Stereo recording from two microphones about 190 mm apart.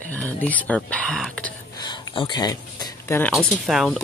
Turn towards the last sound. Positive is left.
turn(degrees=0)  # may be behind; listen again after turning